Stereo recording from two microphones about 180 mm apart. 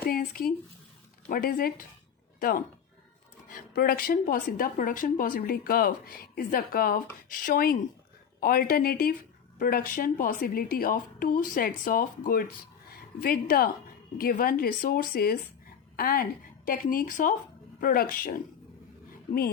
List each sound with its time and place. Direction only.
0.1 s a sound: 55° left (ahead or behind)
1.3 s speech: 55° left (ahead or behind)
3.8 s a woman's voice: 55° left (ahead or behind)